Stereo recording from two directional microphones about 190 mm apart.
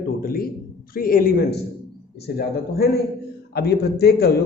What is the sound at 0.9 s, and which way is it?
A man's voice, 50° left (ahead or behind).